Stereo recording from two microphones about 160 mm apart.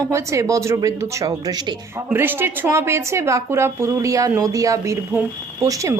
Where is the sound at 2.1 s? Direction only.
15° right (ahead or behind).